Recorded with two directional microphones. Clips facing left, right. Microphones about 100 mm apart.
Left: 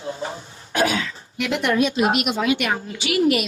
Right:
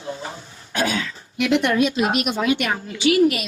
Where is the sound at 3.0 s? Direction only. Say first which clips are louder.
Right 2 dB; 30° right (ahead or behind).